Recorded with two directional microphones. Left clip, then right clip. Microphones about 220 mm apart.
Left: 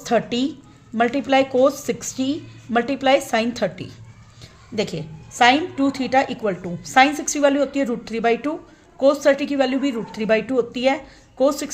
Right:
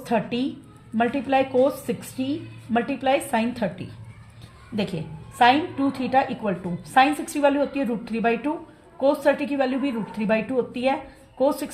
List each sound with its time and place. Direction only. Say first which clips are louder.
0.0 s a woman's voice: left 4 dB; 40° left (ahead or behind)